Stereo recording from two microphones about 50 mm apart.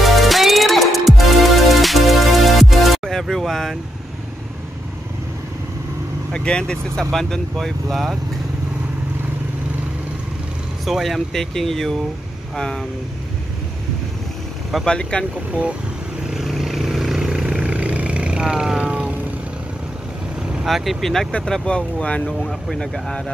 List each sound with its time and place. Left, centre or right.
0.0 s music: centre
6.3 s speech: centre
7.1 s speech: centre
10.9 s speech: centre
14.9 s speech: centre
16.3 s vehicle: centre
18.9 s vehicle: right
20.6 s speech: centre
21.6 s speech: left
22.5 s speech: centre